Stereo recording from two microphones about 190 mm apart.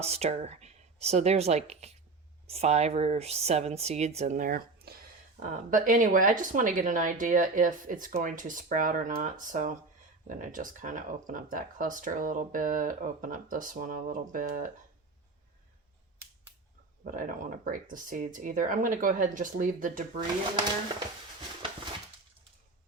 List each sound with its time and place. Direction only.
0.0 s speech: 35° right (ahead or behind)
17.0 s speech: 45° right (ahead or behind)